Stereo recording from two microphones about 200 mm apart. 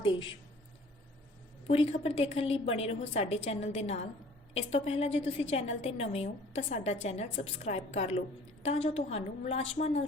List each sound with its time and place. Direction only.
1.6 s a woman's voice: 30° left (ahead or behind)